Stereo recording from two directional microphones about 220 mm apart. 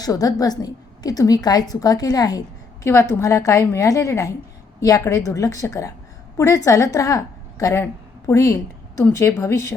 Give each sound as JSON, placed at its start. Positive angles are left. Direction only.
{"t": 0.0, "sound": "a woman's voice", "side_deg": 15}